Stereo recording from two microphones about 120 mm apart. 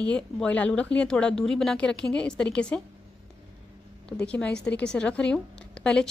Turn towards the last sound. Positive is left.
turn(degrees=5)  # may be behind; listen again after turning